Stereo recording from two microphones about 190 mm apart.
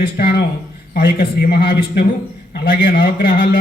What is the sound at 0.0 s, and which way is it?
A man's voice, 50° left (ahead or behind).